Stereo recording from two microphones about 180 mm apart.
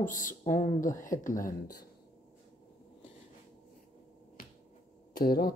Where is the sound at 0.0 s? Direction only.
45° left (ahead or behind).